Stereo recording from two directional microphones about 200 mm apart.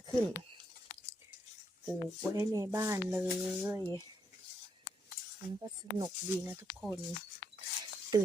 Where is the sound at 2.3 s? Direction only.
15° right (ahead or behind).